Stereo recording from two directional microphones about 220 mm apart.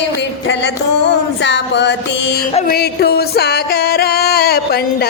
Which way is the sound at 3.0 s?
45° left (ahead or behind).